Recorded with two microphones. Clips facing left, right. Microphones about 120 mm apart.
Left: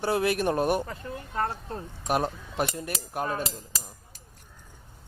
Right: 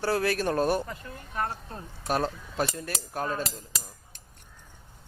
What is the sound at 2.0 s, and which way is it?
Cutlery, 15° left (ahead or behind).